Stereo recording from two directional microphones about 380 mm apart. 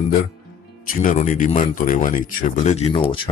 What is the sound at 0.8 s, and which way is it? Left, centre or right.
Speech, centre.